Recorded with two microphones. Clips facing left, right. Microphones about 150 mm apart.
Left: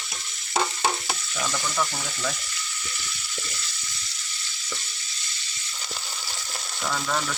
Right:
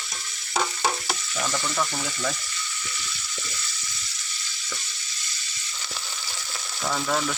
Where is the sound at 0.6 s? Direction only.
5° left (ahead or behind).